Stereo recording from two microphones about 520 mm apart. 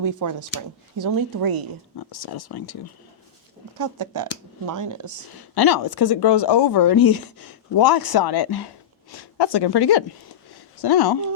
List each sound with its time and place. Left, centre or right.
0.0 s speech: right
2.0 s speech: left
3.8 s speech: right
5.5 s speech: left